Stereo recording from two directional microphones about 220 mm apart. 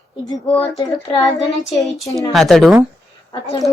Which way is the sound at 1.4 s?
Centre (ahead or behind).